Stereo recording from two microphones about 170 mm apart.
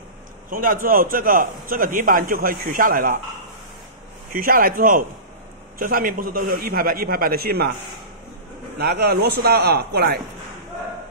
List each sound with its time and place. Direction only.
0.5 s a man's voice: 55° right (ahead or behind)
4.4 s a man's voice: 60° right (ahead or behind)
8.7 s a man's voice: 70° right (ahead or behind)